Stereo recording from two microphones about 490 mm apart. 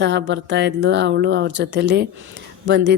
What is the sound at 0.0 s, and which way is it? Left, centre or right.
Speech, right.